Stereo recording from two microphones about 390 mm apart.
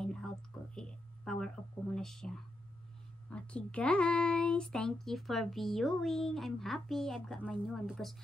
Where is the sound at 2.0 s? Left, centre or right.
Centre.